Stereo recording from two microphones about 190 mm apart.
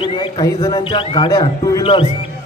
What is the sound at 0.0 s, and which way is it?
A man's voice, 25° left (ahead or behind).